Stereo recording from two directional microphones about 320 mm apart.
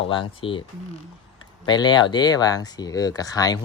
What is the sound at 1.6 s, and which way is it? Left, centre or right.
Speech, centre.